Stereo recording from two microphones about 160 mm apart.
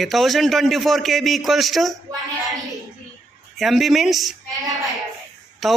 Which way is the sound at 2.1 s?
20° right (ahead or behind).